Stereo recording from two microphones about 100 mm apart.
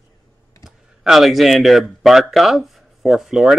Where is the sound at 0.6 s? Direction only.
Centre (ahead or behind).